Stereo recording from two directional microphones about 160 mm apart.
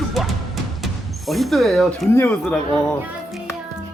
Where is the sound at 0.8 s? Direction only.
Centre (ahead or behind).